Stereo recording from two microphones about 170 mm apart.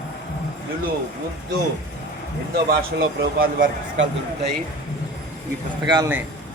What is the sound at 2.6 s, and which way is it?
Speech, 60° right (ahead or behind).